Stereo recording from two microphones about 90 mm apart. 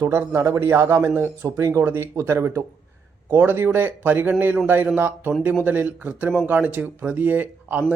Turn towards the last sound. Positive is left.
turn(degrees=-20)  # may be behind; listen again after turning